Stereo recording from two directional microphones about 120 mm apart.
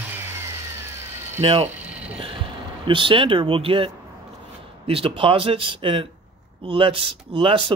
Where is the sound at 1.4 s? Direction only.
55° right (ahead or behind).